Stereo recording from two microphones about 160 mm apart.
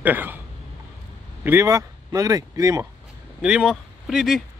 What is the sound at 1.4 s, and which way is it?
Speech, 15° right (ahead or behind).